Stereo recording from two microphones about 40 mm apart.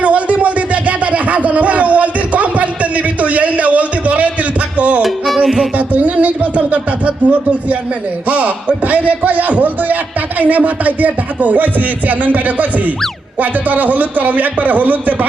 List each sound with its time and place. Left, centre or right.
0.0 s a sound: right
4.8 s music: right
5.0 s music: centre
5.7 s speech: right